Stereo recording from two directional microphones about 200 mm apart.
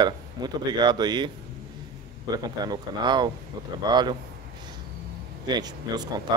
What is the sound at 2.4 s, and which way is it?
Speech, 20° right (ahead or behind).